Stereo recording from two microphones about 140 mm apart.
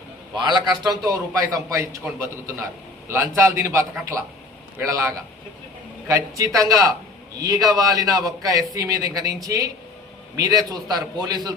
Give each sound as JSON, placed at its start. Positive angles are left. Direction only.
{"t": 0.3, "sound": "a man's voice", "side_deg": -30}